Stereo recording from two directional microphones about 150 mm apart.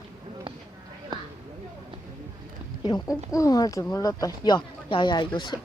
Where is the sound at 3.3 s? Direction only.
25° left (ahead or behind).